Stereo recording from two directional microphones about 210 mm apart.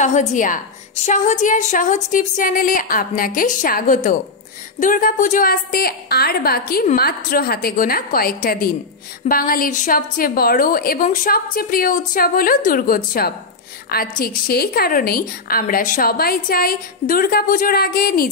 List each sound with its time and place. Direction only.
0.0 s a woman's voice: 35° left (ahead or behind)